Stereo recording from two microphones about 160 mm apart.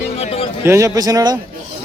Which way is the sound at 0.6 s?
15° right (ahead or behind).